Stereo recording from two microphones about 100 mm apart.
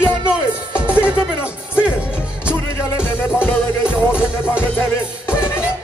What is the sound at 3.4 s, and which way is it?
Music, 20° left (ahead or behind).